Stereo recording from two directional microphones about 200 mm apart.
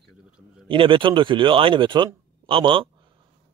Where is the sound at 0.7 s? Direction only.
25° right (ahead or behind).